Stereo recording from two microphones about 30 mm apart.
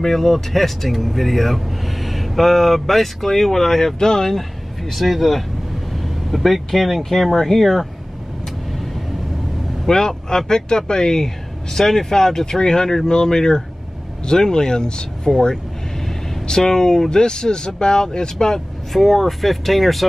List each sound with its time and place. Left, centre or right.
0.0 s speech: centre
4.9 s speech: centre
9.8 s speech: centre
16.4 s speech: left
18.9 s speech: centre